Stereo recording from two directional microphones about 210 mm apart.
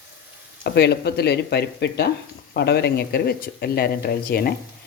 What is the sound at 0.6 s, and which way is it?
Speech, 50° left (ahead or behind).